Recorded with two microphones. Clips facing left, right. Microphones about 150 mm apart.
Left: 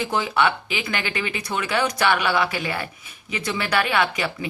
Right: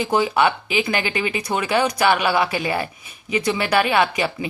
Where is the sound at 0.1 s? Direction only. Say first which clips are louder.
Right 4 dB; 25° right (ahead or behind).